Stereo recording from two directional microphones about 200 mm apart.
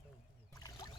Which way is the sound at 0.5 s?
15° left (ahead or behind).